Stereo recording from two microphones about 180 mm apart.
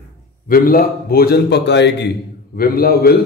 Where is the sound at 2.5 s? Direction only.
55° left (ahead or behind).